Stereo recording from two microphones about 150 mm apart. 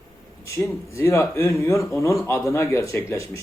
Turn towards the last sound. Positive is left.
turn(degrees=20)  # may be behind; listen again after turning